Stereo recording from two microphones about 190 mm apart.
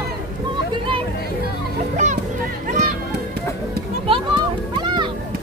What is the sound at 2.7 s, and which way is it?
Music, 40° right (ahead or behind).